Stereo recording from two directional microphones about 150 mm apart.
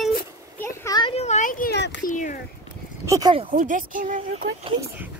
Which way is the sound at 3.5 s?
60° right (ahead or behind).